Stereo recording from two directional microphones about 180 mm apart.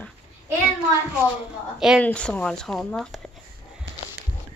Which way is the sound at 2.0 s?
5° left (ahead or behind).